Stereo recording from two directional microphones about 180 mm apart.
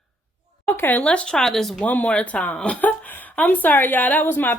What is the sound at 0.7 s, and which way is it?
Speech, 10° left (ahead or behind).